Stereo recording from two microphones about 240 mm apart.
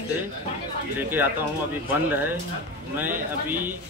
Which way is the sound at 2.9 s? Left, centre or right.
Centre.